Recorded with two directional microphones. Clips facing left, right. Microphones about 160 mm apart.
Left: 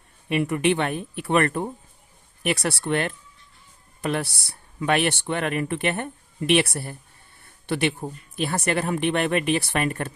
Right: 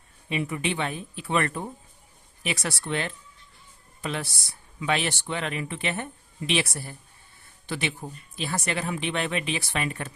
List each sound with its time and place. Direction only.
0.3 s speech: 60° left (ahead or behind)
7.4 s a sound: 60° left (ahead or behind)
8.4 s speech: 55° left (ahead or behind)